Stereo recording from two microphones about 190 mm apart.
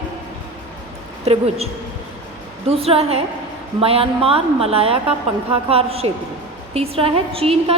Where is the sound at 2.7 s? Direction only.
30° right (ahead or behind).